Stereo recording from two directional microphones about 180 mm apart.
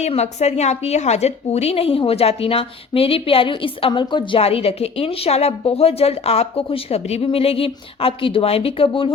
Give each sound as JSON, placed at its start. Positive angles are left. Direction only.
{"t": 0.0, "sound": "a woman's voice", "side_deg": 35}